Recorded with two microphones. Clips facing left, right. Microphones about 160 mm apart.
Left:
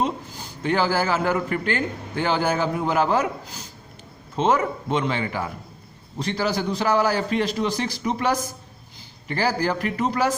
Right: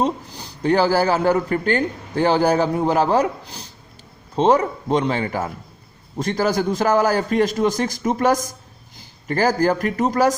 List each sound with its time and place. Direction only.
0.0 s a man's voice: 35° right (ahead or behind)